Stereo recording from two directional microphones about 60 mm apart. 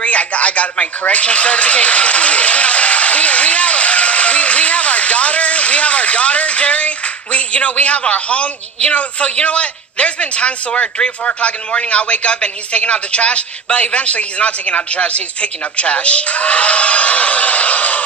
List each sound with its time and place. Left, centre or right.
0.0 s television: left
7.3 s a woman's voice: left